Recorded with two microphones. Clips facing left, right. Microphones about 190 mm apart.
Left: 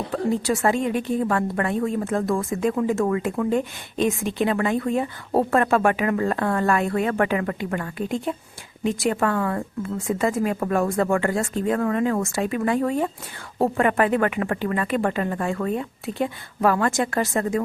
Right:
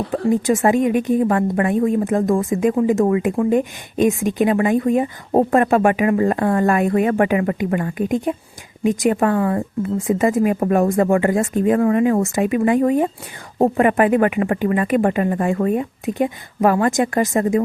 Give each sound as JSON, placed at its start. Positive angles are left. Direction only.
{"t": 0.1, "sound": "speech", "side_deg": -15}
{"t": 4.4, "sound": "speech", "side_deg": -15}